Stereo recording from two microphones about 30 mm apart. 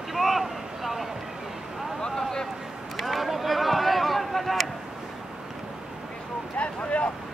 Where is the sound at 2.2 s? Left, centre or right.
Centre.